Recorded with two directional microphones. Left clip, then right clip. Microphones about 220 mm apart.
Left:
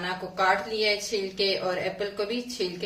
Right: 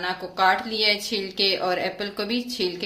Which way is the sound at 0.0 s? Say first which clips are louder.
Right 4 dB; 50° right (ahead or behind).